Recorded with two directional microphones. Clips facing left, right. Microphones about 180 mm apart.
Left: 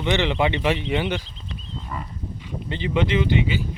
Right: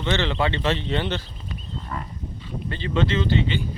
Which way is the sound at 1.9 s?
5° left (ahead or behind).